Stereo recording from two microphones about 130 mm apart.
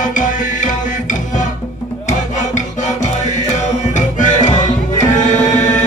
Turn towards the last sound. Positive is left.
turn(degrees=65)  # may be behind; listen again after turning